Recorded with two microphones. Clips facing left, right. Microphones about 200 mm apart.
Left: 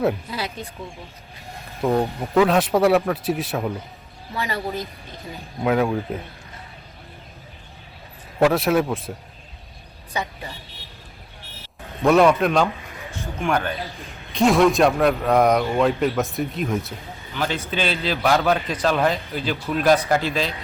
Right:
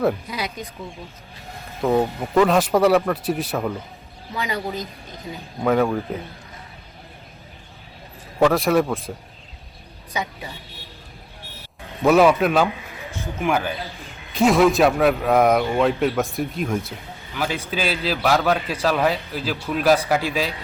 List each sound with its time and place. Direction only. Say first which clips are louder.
0.3 s speech: even; 15° right (ahead or behind)
1.8 s a man's voice: right 1 dB; 5° right (ahead or behind)
4.4 s speech: even; 15° right (ahead or behind)
5.6 s a man's voice: right 1 dB; 5° left (ahead or behind)
8.4 s a man's voice: right 1 dB; 5° left (ahead or behind)
10.1 s a woman's voice: even; 15° right (ahead or behind)
12.0 s a man's voice: right 1 dB; 5° right (ahead or behind)